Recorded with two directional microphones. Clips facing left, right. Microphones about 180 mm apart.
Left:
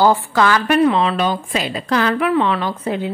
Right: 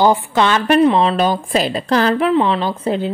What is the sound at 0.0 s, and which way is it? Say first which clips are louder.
A woman's voice: right 1 dB; 20° right (ahead or behind).